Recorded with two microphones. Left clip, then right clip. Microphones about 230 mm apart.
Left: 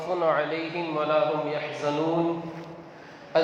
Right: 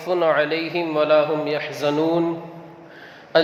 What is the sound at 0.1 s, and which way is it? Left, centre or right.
A man's voice, right.